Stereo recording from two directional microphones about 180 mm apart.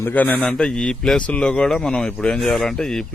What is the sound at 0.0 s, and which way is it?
A man's voice, 10° left (ahead or behind).